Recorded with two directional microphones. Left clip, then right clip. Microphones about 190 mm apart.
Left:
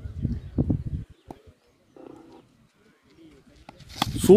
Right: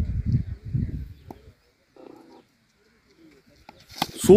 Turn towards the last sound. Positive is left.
turn(degrees=0)  # may be behind; listen again after turning